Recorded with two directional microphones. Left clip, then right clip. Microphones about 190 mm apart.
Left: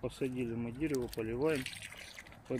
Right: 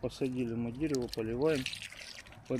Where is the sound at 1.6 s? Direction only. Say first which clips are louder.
Right 3 dB; 10° left (ahead or behind).